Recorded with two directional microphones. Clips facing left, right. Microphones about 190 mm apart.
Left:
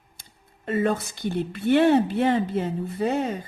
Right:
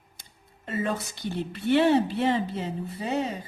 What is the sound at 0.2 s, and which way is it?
Speech, 55° left (ahead or behind).